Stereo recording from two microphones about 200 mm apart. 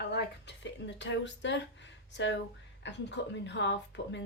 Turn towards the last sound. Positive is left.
turn(degrees=65)  # may be behind; listen again after turning